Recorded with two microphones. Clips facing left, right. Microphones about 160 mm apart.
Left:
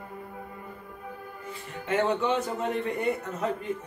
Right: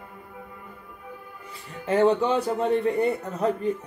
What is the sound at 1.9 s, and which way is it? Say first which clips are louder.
Speech: right 5 dB; 35° right (ahead or behind).